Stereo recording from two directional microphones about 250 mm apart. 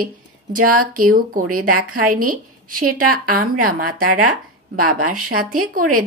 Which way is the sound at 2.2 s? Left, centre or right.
Right.